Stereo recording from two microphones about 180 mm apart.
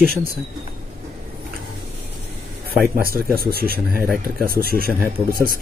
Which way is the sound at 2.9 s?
55° right (ahead or behind).